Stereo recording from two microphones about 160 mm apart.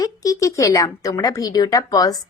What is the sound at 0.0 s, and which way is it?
Speech, 20° left (ahead or behind).